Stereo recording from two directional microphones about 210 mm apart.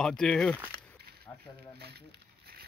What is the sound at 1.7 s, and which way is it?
Speech, 50° right (ahead or behind).